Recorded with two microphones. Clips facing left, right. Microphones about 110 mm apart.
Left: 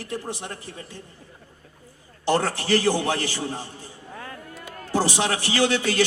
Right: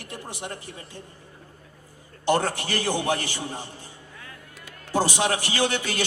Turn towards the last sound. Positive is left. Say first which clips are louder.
# left 4 dB
turn(degrees=-20)  # may be behind; listen again after turning